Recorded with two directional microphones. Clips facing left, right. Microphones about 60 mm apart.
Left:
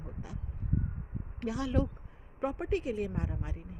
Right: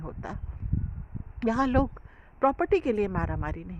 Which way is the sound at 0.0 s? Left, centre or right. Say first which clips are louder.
Right 7 dB; right.